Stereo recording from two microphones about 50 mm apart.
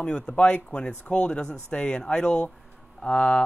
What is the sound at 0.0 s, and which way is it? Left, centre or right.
Speech, left.